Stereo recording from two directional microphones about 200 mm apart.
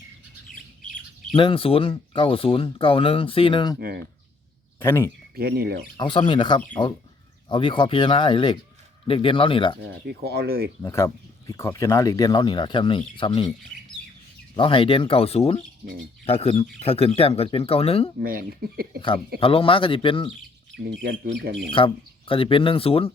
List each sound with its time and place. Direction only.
1.4 s speech: 25° left (ahead or behind)
3.8 s speech: 50° right (ahead or behind)
4.8 s speech: 10° left (ahead or behind)
5.3 s speech: 50° right (ahead or behind)
6.0 s speech: 25° left (ahead or behind)
10.1 s speech: 55° right (ahead or behind)
10.8 s speech: 15° left (ahead or behind)
14.5 s speech: 25° left (ahead or behind)
18.2 s speech: 45° right (ahead or behind)
19.4 s speech: 25° left (ahead or behind)
21.8 s speech: 25° left (ahead or behind)